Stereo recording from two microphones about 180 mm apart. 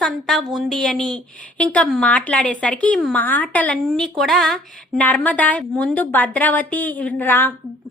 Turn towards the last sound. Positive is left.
turn(degrees=10)  # may be behind; listen again after turning